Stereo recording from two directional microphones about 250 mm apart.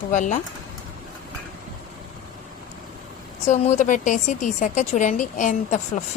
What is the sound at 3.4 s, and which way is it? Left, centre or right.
A woman's voice, left.